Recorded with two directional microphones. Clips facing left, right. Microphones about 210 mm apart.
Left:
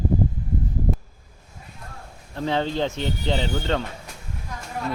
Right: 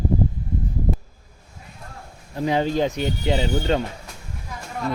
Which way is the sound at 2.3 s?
15° right (ahead or behind).